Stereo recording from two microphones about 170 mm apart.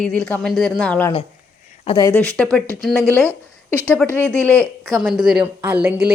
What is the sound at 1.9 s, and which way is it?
Speech, 25° left (ahead or behind).